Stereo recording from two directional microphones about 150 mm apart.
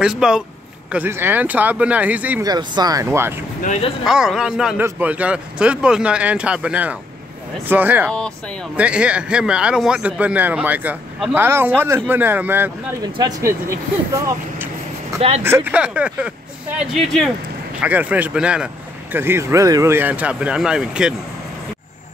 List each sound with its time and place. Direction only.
0.0 s speech: 5° right (ahead or behind)
2.4 s speech: 25° right (ahead or behind)
3.6 s speech: 50° left (ahead or behind)
4.0 s speech: 5° right (ahead or behind)
13.0 s speech: 25° right (ahead or behind)
15.1 s speech: 45° right (ahead or behind)
15.4 s speech: 15° right (ahead or behind); by 17.3 s centre (ahead or behind)
17.7 s speech: 10° right (ahead or behind)